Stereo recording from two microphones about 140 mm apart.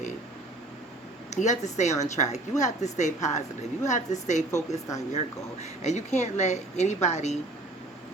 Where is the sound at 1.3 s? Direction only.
55° left (ahead or behind).